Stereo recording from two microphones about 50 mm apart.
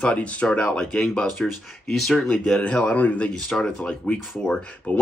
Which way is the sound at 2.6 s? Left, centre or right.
Left.